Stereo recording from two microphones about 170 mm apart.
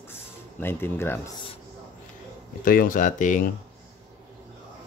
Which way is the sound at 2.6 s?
55° left (ahead or behind).